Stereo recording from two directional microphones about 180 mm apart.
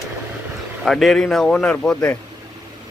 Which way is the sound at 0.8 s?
Centre (ahead or behind).